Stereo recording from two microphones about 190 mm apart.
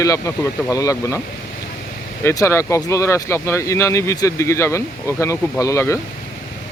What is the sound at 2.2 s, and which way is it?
Speech, 15° left (ahead or behind).